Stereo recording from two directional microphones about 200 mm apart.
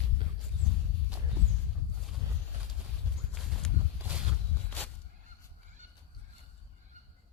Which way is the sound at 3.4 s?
Centre (ahead or behind).